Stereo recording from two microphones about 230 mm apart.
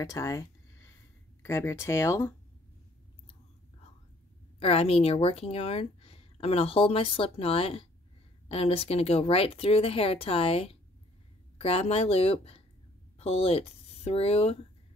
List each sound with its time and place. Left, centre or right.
0.0 s a sound: centre
1.4 s speech: centre
4.6 s speech: left